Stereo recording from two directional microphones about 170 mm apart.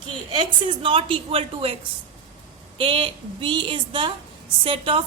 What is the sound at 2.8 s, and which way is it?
A woman's voice, 30° right (ahead or behind).